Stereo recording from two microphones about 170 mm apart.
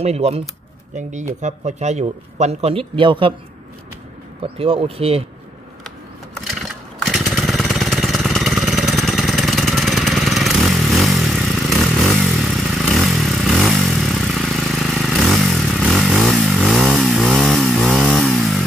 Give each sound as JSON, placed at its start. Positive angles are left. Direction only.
{"t": 0.0, "sound": "speech", "side_deg": -40}
{"t": 1.4, "sound": "speech", "side_deg": -45}
{"t": 4.6, "sound": "speech", "side_deg": -35}
{"t": 7.0, "sound": "a sound", "side_deg": 0}